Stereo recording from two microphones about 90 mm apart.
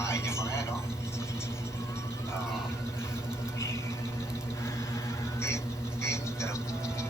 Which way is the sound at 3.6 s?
30° left (ahead or behind).